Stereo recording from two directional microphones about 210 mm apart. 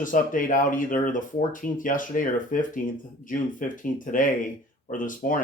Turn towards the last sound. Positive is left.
turn(degrees=40)  # may be behind; listen again after turning